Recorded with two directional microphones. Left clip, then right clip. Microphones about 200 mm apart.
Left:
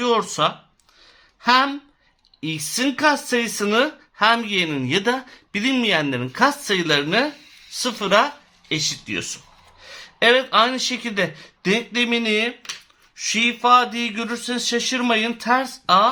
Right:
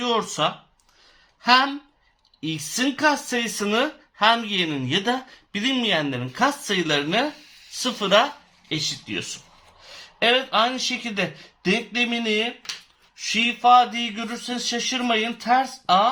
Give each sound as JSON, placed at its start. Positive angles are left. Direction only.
{"t": 0.0, "sound": "speech", "side_deg": 30}
{"t": 8.7, "sound": "speech", "side_deg": 40}